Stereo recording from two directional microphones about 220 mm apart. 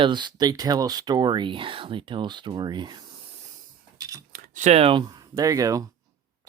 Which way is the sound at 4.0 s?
15° right (ahead or behind).